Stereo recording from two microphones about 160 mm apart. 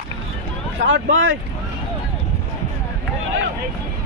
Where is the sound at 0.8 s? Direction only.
90° right.